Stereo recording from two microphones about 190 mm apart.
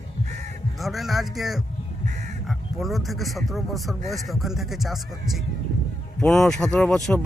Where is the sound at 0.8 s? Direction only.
Centre (ahead or behind).